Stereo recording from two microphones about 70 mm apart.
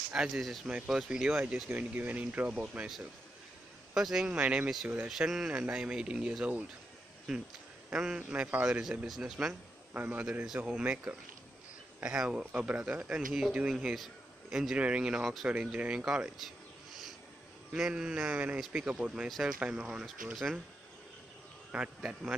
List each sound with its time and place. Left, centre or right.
0.1 s speech: centre
3.9 s speech: centre
4.3 s speech: centre
7.3 s speech: centre
7.9 s speech: centre
8.6 s a man's voice: centre
17.7 s speech: centre
19.2 s speech: centre
19.7 s speech: centre
20.3 s speech: centre
21.7 s speech: centre